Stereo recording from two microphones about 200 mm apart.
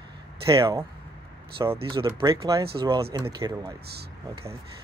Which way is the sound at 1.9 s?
25° right (ahead or behind).